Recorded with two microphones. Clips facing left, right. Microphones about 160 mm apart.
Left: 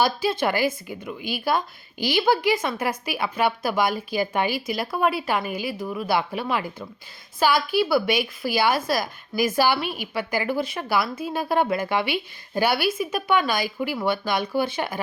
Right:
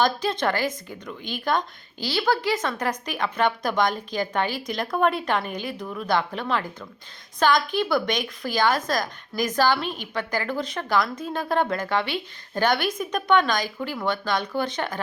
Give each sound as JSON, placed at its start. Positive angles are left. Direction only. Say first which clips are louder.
{"t": 0.0, "sound": "a woman's voice", "louder": "left 1 dB", "side_deg": 5}